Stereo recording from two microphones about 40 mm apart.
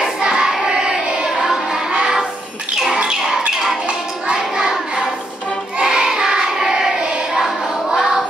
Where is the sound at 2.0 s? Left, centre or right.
Centre.